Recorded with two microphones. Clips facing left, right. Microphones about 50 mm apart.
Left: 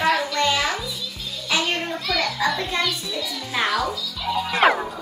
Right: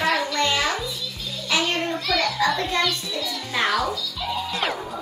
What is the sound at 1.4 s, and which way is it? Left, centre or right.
Children playing, centre.